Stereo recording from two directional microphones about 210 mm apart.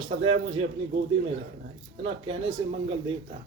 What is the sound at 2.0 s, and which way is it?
Speech, 25° right (ahead or behind).